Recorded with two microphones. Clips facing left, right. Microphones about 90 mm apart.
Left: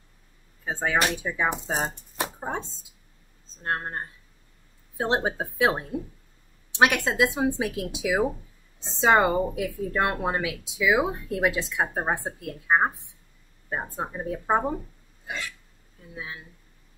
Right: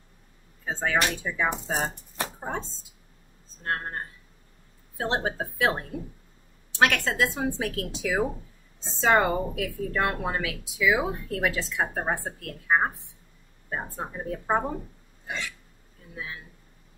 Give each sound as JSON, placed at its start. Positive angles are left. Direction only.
{"t": 0.7, "sound": "a woman's voice", "side_deg": 15}
{"t": 2.1, "sound": "chopping", "side_deg": 15}
{"t": 3.6, "sound": "a woman's voice", "side_deg": 20}
{"t": 15.2, "sound": "hiccup", "side_deg": 5}
{"t": 16.2, "sound": "a woman's voice", "side_deg": 20}